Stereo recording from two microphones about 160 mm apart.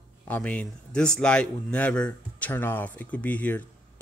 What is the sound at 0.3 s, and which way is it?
Speech, 10° left (ahead or behind).